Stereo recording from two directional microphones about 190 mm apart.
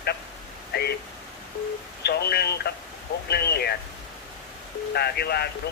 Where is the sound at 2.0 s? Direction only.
60° left (ahead or behind).